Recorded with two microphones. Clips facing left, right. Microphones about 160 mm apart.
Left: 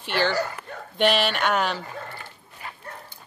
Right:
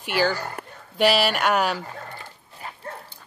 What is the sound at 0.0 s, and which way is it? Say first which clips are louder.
Speech: even; 10° right (ahead or behind).